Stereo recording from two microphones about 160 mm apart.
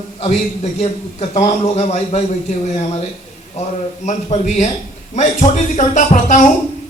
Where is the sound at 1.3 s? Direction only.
45° left (ahead or behind).